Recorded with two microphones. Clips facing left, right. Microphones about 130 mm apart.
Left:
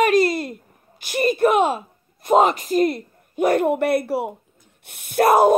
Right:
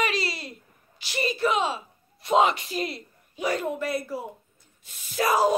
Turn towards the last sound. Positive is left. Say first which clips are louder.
# left 8 dB
turn(degrees=55)  # may be behind; listen again after turning